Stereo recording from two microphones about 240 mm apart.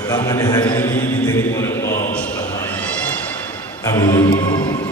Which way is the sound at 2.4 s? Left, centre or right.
Centre.